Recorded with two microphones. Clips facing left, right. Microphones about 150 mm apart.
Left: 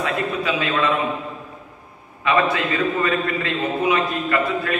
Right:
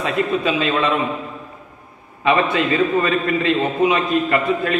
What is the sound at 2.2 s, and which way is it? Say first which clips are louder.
A man's voice: right 2 dB; 20° right (ahead or behind).